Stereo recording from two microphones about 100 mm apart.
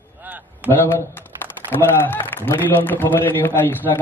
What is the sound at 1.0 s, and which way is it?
A man's voice, 25° left (ahead or behind).